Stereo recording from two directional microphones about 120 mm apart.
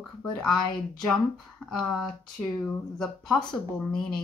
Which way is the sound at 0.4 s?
5° left (ahead or behind).